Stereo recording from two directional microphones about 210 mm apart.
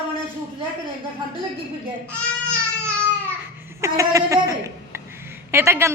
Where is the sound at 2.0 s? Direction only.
5° left (ahead or behind).